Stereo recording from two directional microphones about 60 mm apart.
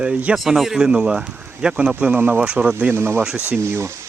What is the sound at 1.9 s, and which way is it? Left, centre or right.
Speech, right.